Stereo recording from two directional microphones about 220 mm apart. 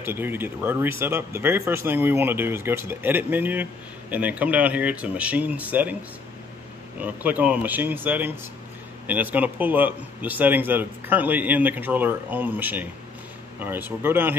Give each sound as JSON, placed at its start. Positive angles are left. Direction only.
{"t": 0.0, "sound": "a man's voice", "side_deg": -10}
{"t": 7.0, "sound": "a man's voice", "side_deg": -5}